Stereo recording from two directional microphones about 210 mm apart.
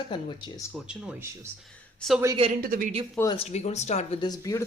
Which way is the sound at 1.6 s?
Centre (ahead or behind).